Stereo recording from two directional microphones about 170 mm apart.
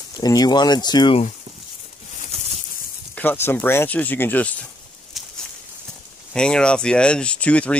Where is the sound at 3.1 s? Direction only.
10° left (ahead or behind).